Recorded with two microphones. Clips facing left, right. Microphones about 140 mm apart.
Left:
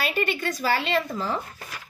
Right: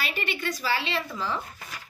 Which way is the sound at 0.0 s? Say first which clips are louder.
Left 5 dB; 45° left (ahead or behind).